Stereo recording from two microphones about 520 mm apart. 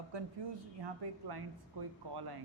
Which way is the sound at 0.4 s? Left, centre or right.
Right.